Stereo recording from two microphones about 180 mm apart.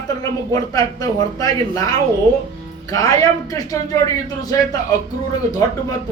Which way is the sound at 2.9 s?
20° left (ahead or behind).